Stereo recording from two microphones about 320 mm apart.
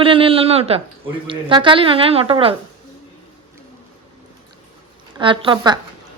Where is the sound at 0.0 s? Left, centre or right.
Centre.